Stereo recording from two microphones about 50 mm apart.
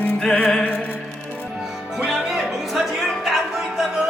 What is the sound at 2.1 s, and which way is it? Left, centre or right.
Music, centre.